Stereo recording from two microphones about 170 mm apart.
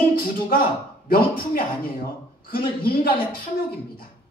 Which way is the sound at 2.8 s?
60° left (ahead or behind).